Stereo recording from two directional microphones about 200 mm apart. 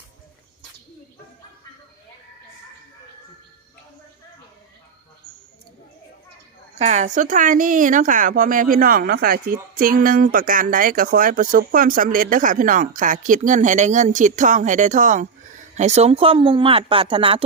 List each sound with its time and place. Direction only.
6.7 s speech: 35° right (ahead or behind)